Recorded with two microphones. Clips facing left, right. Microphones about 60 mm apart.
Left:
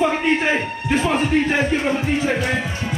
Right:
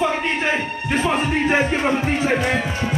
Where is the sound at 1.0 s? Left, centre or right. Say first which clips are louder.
Left 2 dB; centre.